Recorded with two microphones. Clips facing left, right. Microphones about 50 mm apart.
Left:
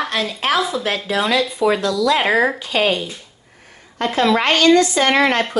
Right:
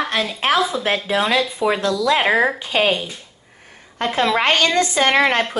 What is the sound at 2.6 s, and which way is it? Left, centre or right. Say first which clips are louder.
A woman's voice: even; right.